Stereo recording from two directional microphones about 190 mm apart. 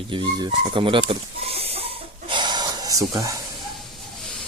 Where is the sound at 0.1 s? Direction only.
25° right (ahead or behind).